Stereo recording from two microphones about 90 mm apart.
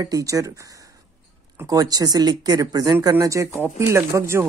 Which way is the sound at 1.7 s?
45° right (ahead or behind).